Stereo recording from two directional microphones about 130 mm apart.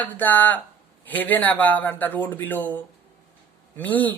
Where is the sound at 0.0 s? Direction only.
15° left (ahead or behind).